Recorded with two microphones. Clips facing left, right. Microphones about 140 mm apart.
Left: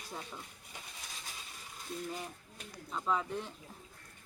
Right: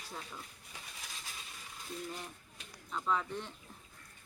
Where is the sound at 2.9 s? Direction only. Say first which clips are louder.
Left 1 dB; 5° left (ahead or behind).